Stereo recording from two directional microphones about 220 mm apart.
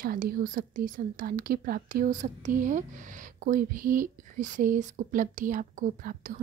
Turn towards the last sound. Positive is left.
turn(degrees=-35)  # may be behind; listen again after turning